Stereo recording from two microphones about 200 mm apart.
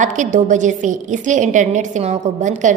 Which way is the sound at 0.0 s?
40° right (ahead or behind).